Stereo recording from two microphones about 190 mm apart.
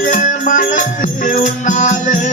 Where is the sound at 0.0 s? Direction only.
40° left (ahead or behind).